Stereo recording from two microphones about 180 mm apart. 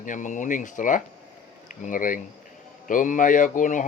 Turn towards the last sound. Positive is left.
turn(degrees=45)  # may be behind; listen again after turning